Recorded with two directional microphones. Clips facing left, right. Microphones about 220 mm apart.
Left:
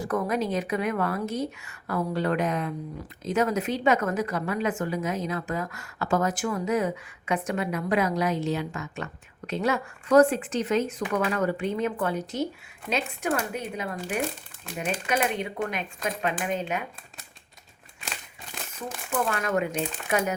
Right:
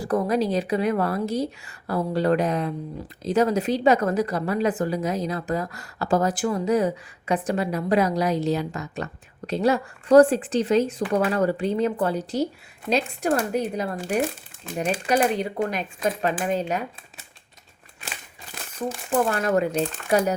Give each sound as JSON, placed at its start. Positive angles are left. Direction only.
{"t": 0.0, "sound": "a woman's voice", "side_deg": -35}
{"t": 19.3, "sound": "a woman's voice", "side_deg": -35}